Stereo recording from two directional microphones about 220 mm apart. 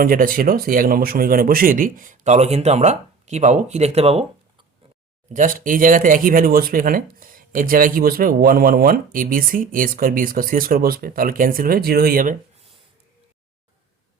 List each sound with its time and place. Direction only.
0.0 s speech: 40° right (ahead or behind)
5.3 s speech: 35° right (ahead or behind)